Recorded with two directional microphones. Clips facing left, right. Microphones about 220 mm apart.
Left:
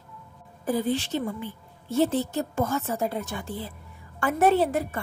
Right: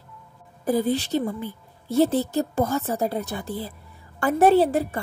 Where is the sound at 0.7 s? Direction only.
40° right (ahead or behind).